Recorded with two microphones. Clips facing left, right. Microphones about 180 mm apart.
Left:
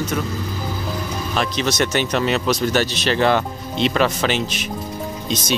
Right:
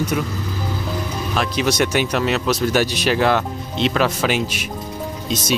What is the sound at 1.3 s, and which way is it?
Speech, 10° right (ahead or behind).